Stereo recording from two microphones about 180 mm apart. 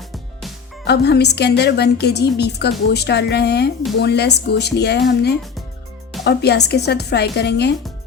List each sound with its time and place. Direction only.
0.9 s a woman's voice: 65° left (ahead or behind)